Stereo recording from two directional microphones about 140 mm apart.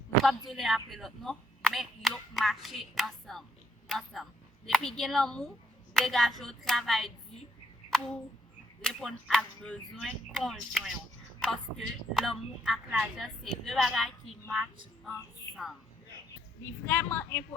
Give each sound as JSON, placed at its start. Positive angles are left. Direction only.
{"t": 0.3, "sound": "a woman's voice", "side_deg": 0}
{"t": 8.8, "sound": "speech", "side_deg": 5}
{"t": 16.8, "sound": "a woman's voice", "side_deg": 20}